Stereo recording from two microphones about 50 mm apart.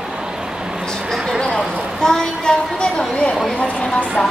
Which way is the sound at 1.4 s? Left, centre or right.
Centre.